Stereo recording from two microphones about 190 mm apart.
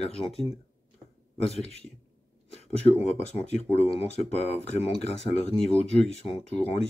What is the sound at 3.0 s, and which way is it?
Speech, 35° left (ahead or behind).